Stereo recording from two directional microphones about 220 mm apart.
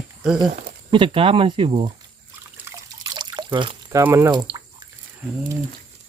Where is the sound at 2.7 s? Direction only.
20° right (ahead or behind).